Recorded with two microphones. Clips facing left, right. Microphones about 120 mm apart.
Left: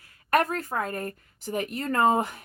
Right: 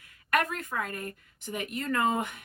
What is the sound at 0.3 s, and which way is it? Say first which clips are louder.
A woman's voice: left 5 dB; 35° left (ahead or behind).